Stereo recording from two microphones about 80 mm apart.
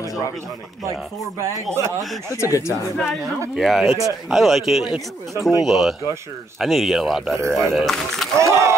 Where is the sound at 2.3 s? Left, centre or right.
Left.